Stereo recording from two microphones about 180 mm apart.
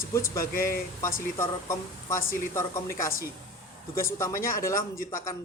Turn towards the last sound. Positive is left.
turn(degrees=15)  # may be behind; listen again after turning